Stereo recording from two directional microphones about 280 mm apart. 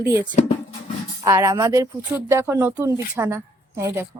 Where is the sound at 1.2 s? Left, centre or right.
Centre.